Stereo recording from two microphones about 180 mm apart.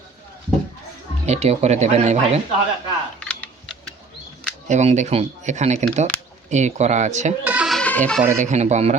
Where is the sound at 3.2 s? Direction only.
5° left (ahead or behind).